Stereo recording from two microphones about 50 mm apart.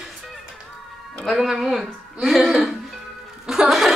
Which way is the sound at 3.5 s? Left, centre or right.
Centre.